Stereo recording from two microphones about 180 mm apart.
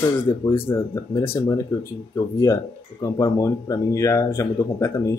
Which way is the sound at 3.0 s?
20° left (ahead or behind).